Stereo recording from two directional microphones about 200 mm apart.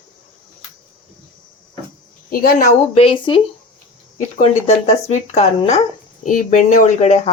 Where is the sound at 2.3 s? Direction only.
45° left (ahead or behind); by 3.4 s 25° left (ahead or behind).